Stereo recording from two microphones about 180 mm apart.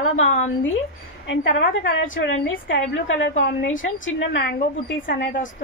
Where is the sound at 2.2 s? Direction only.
75° left (ahead or behind).